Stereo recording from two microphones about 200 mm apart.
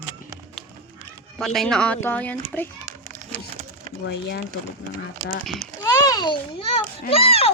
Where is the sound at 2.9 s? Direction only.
40° right (ahead or behind).